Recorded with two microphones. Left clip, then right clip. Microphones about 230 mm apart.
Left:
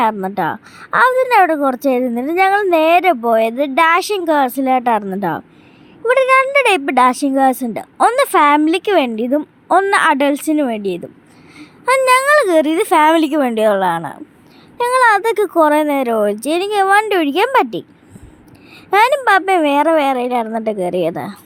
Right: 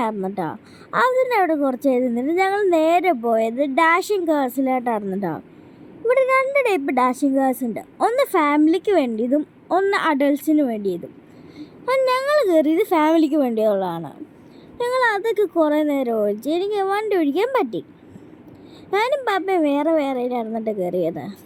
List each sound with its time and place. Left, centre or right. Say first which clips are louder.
0.0 s a woman's voice: left 8 dB; left
18.9 s a woman's voice: left 9 dB; left